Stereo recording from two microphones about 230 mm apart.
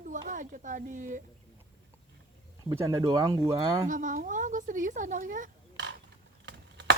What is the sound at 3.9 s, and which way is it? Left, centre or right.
A woman's voice, right.